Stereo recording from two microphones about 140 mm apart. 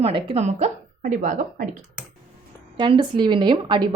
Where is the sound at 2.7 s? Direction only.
35° right (ahead or behind).